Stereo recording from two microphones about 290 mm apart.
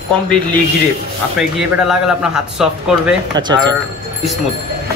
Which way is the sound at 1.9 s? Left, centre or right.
Centre.